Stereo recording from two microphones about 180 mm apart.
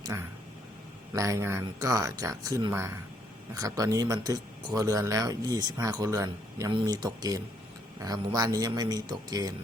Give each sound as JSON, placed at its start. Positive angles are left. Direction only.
{"t": 0.1, "sound": "speech", "side_deg": -15}